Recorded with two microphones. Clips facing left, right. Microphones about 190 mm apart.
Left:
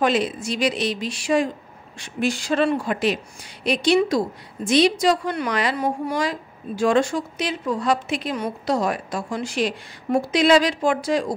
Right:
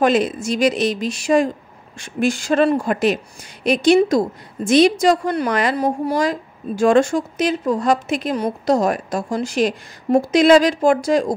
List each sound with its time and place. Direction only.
0.0 s a woman's voice: 45° right (ahead or behind)